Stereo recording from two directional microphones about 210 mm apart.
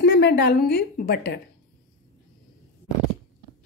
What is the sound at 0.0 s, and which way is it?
A woman's voice, 55° left (ahead or behind).